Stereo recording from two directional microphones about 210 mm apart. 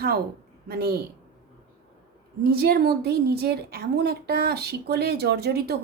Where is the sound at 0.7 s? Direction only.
45° right (ahead or behind).